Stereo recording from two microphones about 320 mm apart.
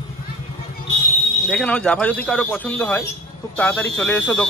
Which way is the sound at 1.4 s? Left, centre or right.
Centre.